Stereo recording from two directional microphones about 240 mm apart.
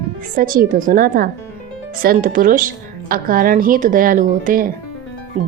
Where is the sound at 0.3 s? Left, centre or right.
Right.